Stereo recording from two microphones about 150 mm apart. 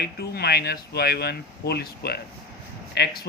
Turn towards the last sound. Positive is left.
turn(degrees=90)